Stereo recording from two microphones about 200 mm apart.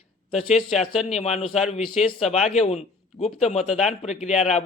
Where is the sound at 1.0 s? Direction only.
35° left (ahead or behind).